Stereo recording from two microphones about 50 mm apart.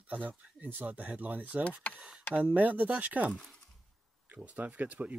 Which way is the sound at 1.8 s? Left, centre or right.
Left.